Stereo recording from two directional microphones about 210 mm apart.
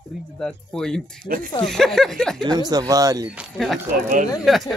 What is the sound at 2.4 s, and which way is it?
Speech, 20° right (ahead or behind).